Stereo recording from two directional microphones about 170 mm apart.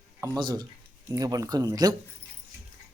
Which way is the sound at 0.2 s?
25° right (ahead or behind).